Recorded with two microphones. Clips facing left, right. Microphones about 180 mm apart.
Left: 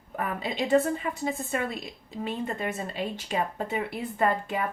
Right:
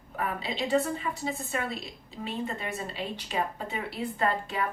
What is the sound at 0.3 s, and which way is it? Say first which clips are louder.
A woman's voice: left 4 dB; 45° left (ahead or behind).